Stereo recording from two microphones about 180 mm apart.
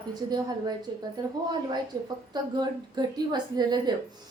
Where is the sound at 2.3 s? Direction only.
25° right (ahead or behind).